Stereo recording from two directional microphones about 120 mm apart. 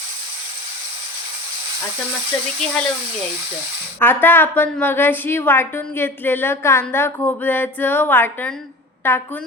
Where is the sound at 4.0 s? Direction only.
15° left (ahead or behind).